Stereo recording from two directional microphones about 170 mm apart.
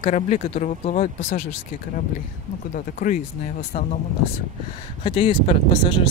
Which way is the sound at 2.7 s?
50° left (ahead or behind).